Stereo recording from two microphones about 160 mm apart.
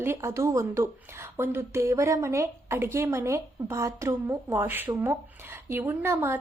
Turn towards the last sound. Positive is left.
turn(degrees=-15)  # may be behind; listen again after turning